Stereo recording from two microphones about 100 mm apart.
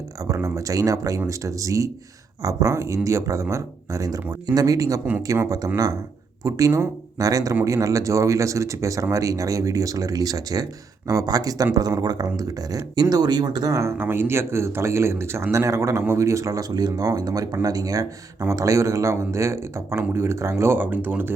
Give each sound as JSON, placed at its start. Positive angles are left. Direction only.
{"t": 0.3, "sound": "speech", "side_deg": -30}